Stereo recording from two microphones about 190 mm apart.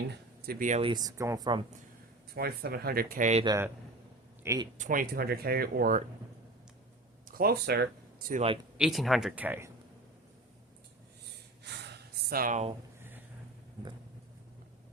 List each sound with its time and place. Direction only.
0.4 s speech: 55° right (ahead or behind)
0.7 s speech: 30° right (ahead or behind)
2.3 s speech: 55° right (ahead or behind)
3.4 s a man's voice: 20° right (ahead or behind)
4.8 s speech: 45° right (ahead or behind)
7.3 s speech: 50° right (ahead or behind)
8.8 s speech: centre (ahead or behind)
11.6 s gasp: 60° right (ahead or behind); by 12.7 s 40° right (ahead or behind)
13.0 s a sound: 10° right (ahead or behind)